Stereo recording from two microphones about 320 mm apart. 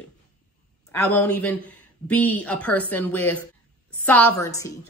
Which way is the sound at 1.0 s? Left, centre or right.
Centre.